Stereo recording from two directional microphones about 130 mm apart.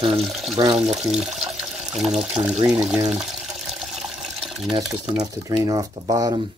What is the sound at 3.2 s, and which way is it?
Water, 5° right (ahead or behind).